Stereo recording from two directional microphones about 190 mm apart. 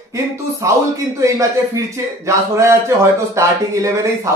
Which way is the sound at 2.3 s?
15° right (ahead or behind).